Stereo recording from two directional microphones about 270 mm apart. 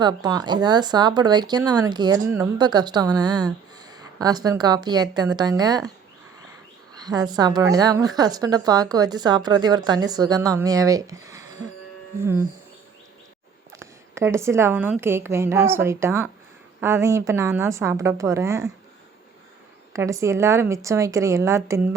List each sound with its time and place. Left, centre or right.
0.0 s a woman's voice: centre
7.0 s a woman's voice: centre
13.7 s a woman's voice: centre
19.9 s a woman's voice: centre